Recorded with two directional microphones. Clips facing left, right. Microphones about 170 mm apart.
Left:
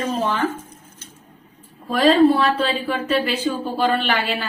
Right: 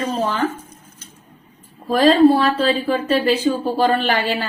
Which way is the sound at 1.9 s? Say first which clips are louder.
Right 2 dB; 35° right (ahead or behind).